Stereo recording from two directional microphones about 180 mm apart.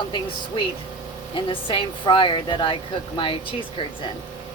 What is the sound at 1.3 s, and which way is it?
A woman's voice, 30° left (ahead or behind).